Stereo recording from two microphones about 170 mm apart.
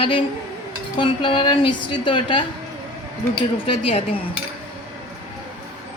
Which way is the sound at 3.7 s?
35° left (ahead or behind).